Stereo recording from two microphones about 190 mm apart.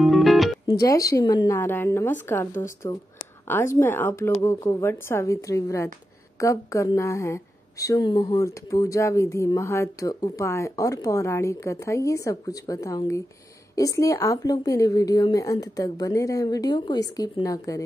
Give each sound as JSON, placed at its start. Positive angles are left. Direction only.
{"t": 0.0, "sound": "music", "side_deg": 0}
{"t": 0.7, "sound": "a woman's voice", "side_deg": 20}